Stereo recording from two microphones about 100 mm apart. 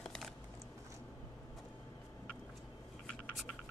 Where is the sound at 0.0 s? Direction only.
5° left (ahead or behind).